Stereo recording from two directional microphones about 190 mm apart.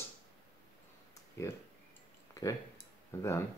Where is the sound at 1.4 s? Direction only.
15° left (ahead or behind).